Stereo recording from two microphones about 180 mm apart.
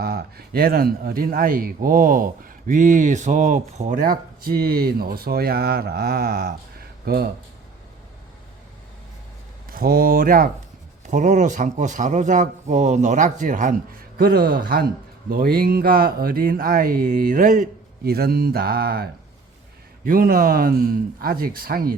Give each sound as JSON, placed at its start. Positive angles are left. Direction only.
{"t": 0.0, "sound": "a man's voice", "side_deg": -60}
{"t": 9.6, "sound": "a man's voice", "side_deg": -55}